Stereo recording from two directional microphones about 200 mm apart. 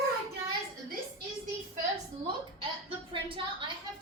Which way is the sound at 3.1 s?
25° right (ahead or behind).